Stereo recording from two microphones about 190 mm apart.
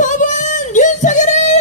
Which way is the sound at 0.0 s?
40° left (ahead or behind).